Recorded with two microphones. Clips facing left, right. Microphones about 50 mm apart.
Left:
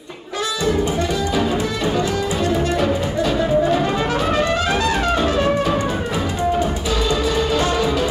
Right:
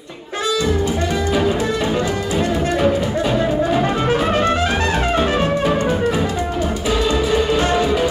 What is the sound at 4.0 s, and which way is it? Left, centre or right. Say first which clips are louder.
Music: right 2 dB; right.